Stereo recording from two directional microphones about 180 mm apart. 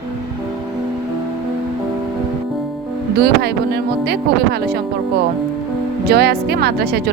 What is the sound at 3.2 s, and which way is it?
Speech, 65° right (ahead or behind).